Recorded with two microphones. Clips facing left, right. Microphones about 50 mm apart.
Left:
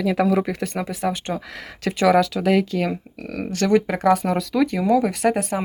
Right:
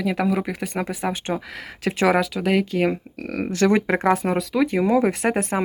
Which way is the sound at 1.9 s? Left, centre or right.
Right.